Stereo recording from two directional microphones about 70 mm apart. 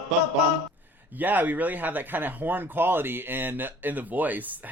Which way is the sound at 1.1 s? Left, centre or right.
Right.